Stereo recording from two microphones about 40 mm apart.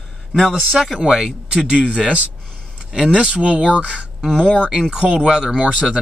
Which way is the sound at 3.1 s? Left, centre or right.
Right.